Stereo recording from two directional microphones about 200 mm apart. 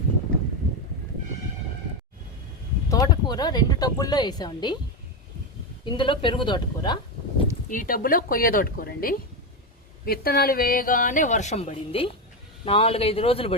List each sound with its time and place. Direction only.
2.9 s speech: 20° left (ahead or behind)
5.8 s speech: 25° left (ahead or behind)
7.7 s a woman's voice: 45° left (ahead or behind); by 13.6 s 30° left (ahead or behind)